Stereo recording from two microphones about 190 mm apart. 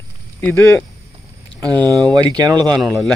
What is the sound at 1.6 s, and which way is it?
Speech, 20° right (ahead or behind).